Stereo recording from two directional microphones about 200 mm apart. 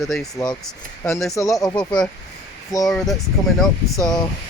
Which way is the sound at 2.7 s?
15° left (ahead or behind).